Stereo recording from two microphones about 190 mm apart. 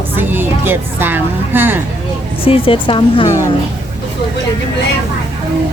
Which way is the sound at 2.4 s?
30° left (ahead or behind).